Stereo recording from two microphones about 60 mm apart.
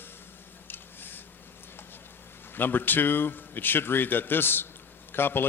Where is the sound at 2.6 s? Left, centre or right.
Left.